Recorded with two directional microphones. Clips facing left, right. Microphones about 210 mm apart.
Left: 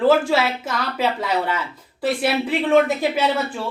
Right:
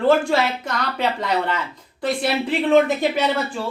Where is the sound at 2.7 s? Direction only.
5° left (ahead or behind).